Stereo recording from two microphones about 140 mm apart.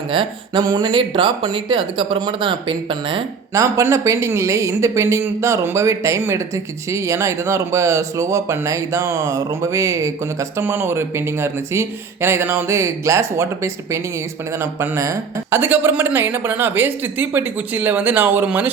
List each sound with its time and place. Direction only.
0.1 s speech: 35° right (ahead or behind)
3.5 s speech: 25° right (ahead or behind)